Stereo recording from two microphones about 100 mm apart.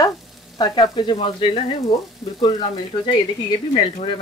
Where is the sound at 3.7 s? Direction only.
60° left (ahead or behind).